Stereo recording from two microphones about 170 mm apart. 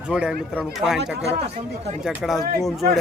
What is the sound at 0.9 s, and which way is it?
Speech, 85° right.